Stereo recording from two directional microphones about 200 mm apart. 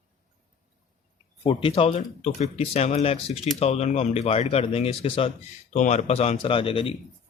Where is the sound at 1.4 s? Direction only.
25° left (ahead or behind).